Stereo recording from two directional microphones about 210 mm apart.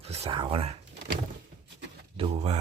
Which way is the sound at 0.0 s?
30° right (ahead or behind).